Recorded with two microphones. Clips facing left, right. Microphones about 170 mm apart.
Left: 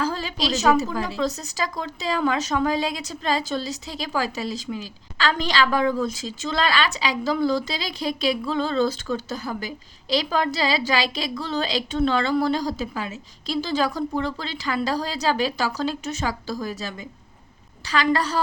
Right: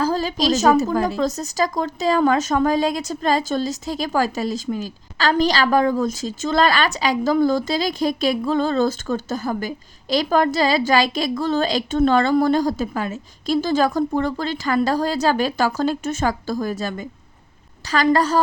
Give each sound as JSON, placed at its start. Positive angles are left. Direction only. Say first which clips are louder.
{"t": 0.0, "sound": "a woman's voice", "louder": "right 6 dB", "side_deg": -40}